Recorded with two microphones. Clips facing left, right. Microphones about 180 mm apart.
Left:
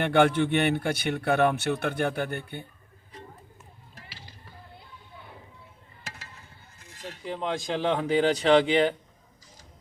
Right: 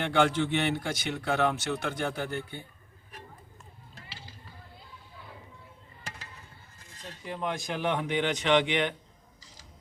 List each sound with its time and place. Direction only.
0.0 s a man's voice: 60° left (ahead or behind)
7.3 s speech: 30° left (ahead or behind)